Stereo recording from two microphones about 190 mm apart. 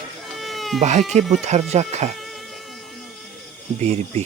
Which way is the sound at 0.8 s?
35° right (ahead or behind).